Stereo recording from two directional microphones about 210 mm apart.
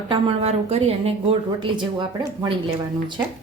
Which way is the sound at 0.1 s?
30° right (ahead or behind).